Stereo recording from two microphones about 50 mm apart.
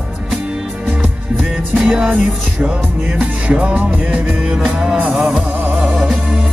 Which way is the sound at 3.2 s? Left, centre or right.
Right.